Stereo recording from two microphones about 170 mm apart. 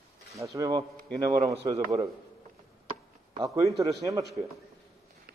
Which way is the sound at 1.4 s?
35° right (ahead or behind).